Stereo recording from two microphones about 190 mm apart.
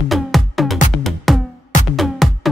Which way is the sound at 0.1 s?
Centre (ahead or behind).